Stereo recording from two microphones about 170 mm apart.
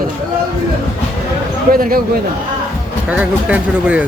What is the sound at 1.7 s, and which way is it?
Speech, 60° right (ahead or behind).